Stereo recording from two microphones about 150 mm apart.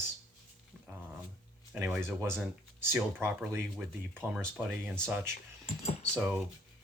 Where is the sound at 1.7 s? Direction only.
10° right (ahead or behind).